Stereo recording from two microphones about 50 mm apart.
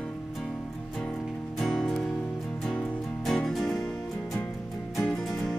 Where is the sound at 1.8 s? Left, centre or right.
Centre.